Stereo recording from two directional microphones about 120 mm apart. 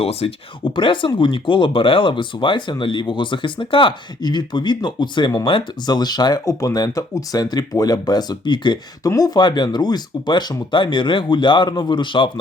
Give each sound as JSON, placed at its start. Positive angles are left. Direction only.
{"t": 0.0, "sound": "speech", "side_deg": 55}